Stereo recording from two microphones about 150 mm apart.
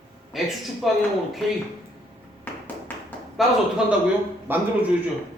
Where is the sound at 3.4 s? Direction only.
Centre (ahead or behind).